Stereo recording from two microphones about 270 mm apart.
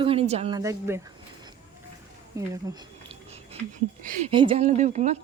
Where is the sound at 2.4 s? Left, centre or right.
Centre.